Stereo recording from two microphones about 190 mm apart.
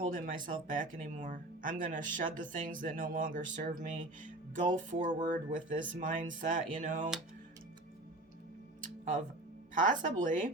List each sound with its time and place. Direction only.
0.1 s speech: 45° right (ahead or behind)
8.8 s music: 45° right (ahead or behind)
9.7 s speech: 40° right (ahead or behind)